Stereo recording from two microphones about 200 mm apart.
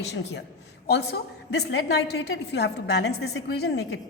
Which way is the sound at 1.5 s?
55° left (ahead or behind).